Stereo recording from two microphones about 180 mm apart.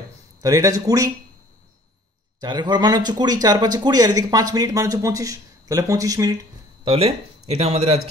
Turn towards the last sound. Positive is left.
turn(degrees=-35)  # may be behind; listen again after turning